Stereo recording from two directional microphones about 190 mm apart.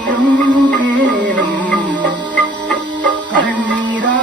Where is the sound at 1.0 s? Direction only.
70° right (ahead or behind).